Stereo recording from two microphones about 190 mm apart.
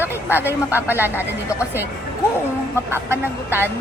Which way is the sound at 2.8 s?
10° right (ahead or behind).